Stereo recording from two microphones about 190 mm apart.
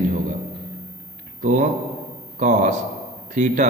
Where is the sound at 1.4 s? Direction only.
40° right (ahead or behind).